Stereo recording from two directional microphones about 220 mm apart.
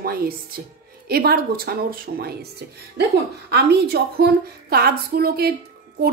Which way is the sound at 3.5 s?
50° right (ahead or behind).